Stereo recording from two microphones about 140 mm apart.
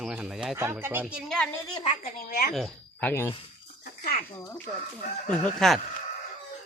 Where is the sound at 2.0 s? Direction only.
90° left.